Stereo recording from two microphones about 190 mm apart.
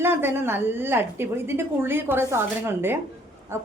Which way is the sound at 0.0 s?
10° right (ahead or behind).